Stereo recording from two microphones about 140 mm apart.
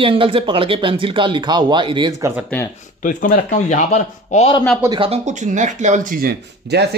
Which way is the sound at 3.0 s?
70° left (ahead or behind).